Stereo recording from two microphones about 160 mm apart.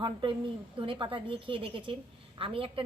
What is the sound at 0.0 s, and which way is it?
A woman's voice, 30° right (ahead or behind).